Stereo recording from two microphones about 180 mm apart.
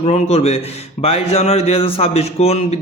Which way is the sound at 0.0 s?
35° left (ahead or behind).